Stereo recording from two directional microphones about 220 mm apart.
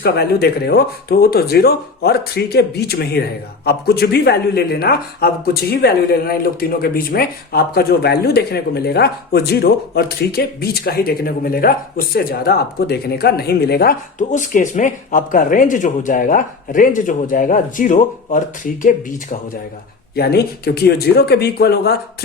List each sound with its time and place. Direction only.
0.0 s speech: 45° left (ahead or behind)